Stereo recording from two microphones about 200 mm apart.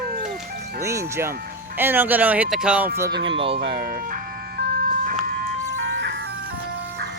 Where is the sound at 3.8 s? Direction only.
45° right (ahead or behind).